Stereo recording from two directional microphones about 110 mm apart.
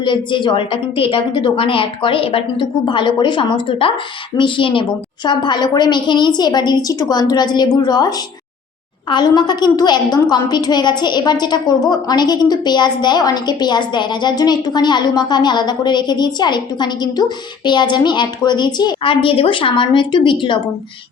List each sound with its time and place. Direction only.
0.0 s a woman's voice: 45° left (ahead or behind)